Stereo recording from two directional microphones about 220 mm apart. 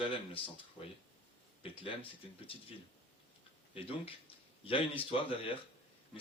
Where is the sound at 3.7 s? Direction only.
25° left (ahead or behind).